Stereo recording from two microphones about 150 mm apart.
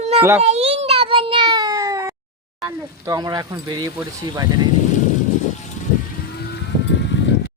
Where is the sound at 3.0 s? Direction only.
25° right (ahead or behind).